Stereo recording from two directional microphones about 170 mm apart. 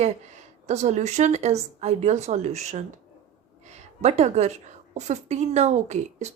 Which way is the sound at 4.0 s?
40° right (ahead or behind).